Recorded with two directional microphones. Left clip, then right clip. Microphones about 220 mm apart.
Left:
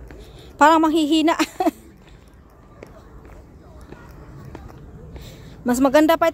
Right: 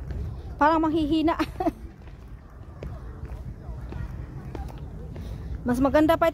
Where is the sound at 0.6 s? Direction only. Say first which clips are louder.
Left 7 dB; 35° left (ahead or behind).